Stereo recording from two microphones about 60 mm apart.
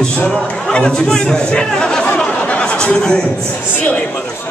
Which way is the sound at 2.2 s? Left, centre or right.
Left.